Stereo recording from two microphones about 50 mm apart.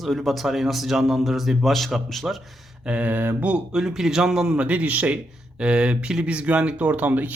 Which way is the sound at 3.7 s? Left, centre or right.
Centre.